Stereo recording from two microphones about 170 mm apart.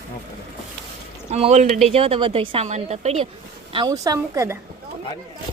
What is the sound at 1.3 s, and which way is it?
A woman's voice, 40° right (ahead or behind).